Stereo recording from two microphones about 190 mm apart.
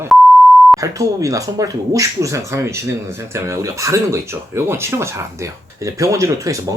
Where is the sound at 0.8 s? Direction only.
15° right (ahead or behind).